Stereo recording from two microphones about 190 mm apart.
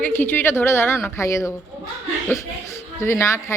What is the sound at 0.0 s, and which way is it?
A woman's voice, 10° left (ahead or behind).